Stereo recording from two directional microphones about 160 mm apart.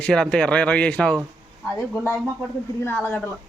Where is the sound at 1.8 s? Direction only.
5° right (ahead or behind).